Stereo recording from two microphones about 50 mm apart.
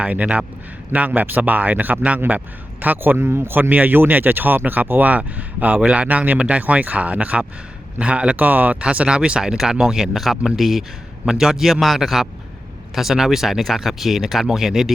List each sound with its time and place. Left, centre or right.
0.0 s speech: right
8.4 s speech: right
8.8 s speech: right